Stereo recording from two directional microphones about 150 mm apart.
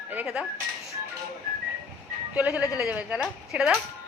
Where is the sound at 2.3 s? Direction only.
Centre (ahead or behind).